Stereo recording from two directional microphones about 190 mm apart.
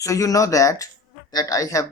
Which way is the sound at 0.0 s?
15° left (ahead or behind).